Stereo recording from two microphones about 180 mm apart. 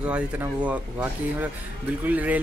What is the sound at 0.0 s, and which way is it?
Speech, 5° right (ahead or behind).